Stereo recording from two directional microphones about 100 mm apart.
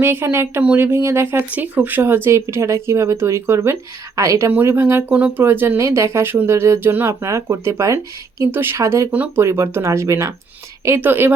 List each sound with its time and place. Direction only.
0.0 s speech: 20° right (ahead or behind)
9.1 s speech: 15° right (ahead or behind)
9.4 s speech: 30° right (ahead or behind)